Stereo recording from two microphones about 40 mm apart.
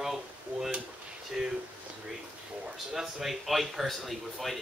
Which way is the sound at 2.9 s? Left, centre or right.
Centre.